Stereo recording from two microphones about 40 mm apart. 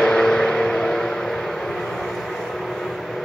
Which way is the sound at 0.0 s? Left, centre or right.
Centre.